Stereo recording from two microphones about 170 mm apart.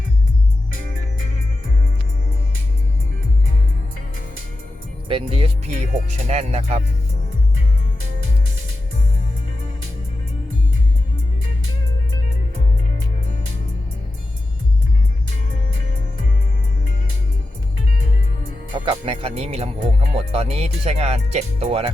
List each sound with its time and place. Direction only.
5.0 s speech: 30° right (ahead or behind)
18.7 s speech: 30° right (ahead or behind)